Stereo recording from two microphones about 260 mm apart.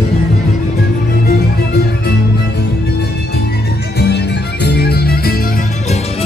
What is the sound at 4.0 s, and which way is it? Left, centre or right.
Music, left.